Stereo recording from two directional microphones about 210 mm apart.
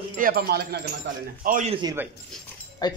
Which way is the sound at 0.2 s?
45° right (ahead or behind).